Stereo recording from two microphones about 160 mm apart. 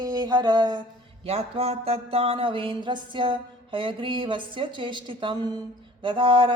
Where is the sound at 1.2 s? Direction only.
40° right (ahead or behind).